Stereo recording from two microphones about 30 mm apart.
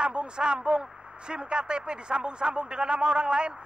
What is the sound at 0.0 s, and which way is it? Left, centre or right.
Speech, right.